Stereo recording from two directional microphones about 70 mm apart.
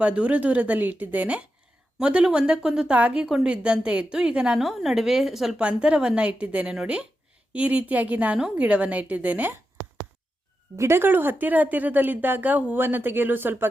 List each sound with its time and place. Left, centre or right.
0.0 s a woman's voice: centre
10.8 s speech: right